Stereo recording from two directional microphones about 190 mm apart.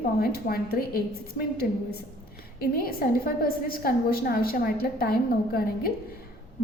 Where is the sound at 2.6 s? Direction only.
50° left (ahead or behind).